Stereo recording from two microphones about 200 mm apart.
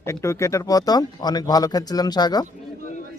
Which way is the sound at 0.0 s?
15° left (ahead or behind).